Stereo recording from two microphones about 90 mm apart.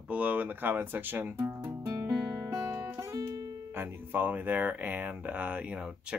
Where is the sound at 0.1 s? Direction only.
20° right (ahead or behind).